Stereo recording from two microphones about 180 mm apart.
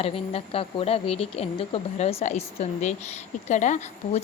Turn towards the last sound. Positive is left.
turn(degrees=40)  # may be behind; listen again after turning